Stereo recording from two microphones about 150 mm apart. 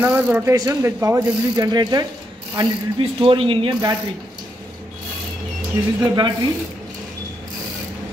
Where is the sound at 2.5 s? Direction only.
35° right (ahead or behind).